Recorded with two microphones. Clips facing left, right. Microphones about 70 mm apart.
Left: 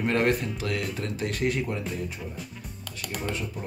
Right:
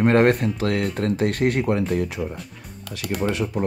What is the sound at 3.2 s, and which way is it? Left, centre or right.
Speech, right.